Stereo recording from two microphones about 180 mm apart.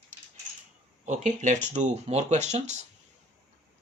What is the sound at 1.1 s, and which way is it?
Speech, 45° right (ahead or behind).